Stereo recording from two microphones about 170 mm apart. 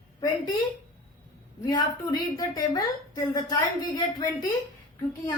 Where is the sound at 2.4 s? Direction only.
25° left (ahead or behind).